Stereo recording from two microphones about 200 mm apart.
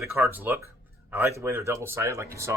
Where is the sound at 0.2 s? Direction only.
10° right (ahead or behind).